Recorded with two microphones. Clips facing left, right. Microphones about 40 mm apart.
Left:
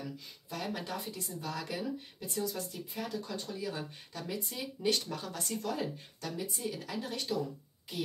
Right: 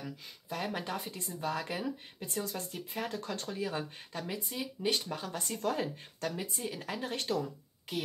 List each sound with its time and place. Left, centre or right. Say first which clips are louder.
0.5 s speech: right 2 dB; right
2.2 s speech: left 1 dB; right
3.4 s speech: right 2 dB; right
4.2 s speech: right 1 dB; centre
5.6 s speech: right 4 dB; right